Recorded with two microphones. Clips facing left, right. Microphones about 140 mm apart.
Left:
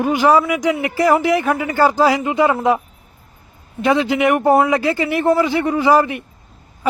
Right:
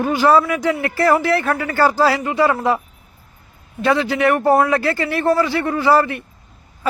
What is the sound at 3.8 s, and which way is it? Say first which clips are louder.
A man's voice: left 1 dB; 20° left (ahead or behind).